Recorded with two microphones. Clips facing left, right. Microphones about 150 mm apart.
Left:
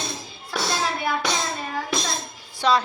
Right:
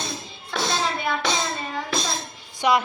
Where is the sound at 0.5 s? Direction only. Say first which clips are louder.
Right 1 dB; 5° left (ahead or behind).